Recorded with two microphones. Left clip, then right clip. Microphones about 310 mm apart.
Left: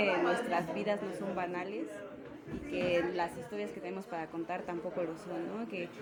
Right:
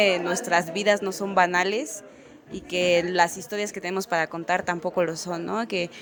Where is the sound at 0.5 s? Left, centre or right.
Right.